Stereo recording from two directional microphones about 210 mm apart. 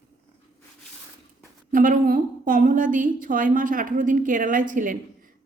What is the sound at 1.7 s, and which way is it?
A woman's voice, 40° right (ahead or behind).